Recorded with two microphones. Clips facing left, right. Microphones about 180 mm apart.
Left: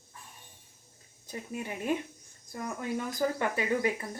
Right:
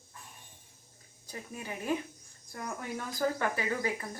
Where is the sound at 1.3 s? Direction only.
25° left (ahead or behind).